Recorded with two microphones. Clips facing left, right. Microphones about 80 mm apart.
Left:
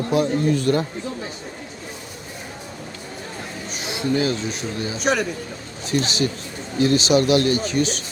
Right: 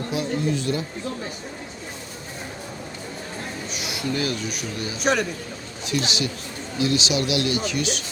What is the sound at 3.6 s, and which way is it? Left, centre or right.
Speech, left.